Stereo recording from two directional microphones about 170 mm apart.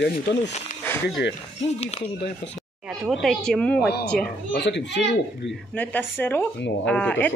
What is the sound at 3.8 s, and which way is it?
Speech, 75° left (ahead or behind).